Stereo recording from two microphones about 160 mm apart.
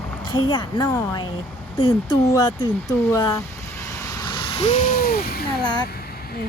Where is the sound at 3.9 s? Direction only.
25° left (ahead or behind); by 5.5 s 70° left (ahead or behind).